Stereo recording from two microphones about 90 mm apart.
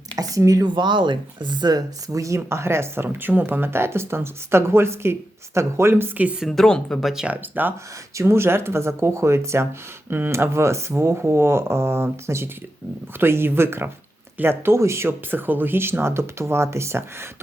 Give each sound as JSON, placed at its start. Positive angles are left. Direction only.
{"t": 0.2, "sound": "speech", "side_deg": -40}
{"t": 0.8, "sound": "speech", "side_deg": -60}
{"t": 2.0, "sound": "speech", "side_deg": -35}
{"t": 6.4, "sound": "speech", "side_deg": 5}
{"t": 7.1, "sound": "speech", "side_deg": -5}
{"t": 7.6, "sound": "speech", "side_deg": -20}
{"t": 8.1, "sound": "speech", "side_deg": -30}